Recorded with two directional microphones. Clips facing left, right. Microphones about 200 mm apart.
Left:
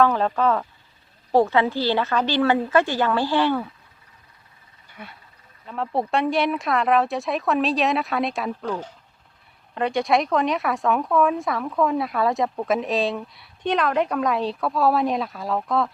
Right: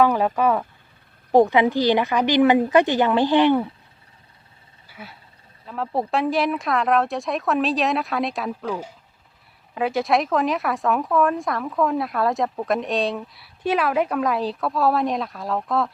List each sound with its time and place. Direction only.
0.0 s a woman's voice: 10° right (ahead or behind)
4.9 s a sound: 5° right (ahead or behind)
5.6 s a woman's voice: centre (ahead or behind)